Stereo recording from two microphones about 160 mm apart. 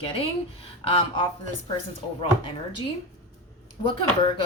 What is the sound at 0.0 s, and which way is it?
Speech, 35° left (ahead or behind).